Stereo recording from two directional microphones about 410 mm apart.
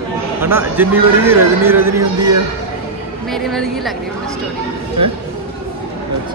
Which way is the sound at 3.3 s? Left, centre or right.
Centre.